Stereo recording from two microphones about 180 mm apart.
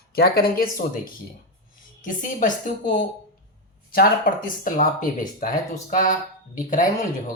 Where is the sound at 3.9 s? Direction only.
50° left (ahead or behind).